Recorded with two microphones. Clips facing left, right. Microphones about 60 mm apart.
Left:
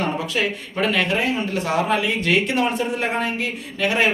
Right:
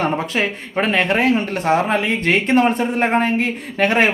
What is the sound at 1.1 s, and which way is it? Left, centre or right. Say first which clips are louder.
Speech: right 5 dB; right.